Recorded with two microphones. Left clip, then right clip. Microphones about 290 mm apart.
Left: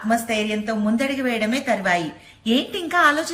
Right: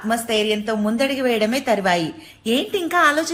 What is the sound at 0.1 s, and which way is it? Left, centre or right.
A woman's voice, centre.